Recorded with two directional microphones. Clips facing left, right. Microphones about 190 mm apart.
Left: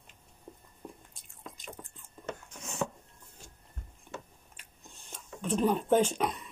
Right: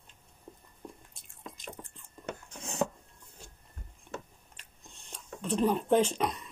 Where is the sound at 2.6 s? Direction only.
30° right (ahead or behind).